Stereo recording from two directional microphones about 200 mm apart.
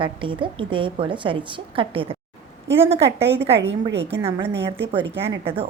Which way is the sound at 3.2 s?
60° right (ahead or behind).